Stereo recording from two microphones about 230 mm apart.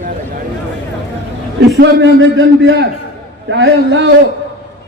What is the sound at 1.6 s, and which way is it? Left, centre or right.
A man's voice, right.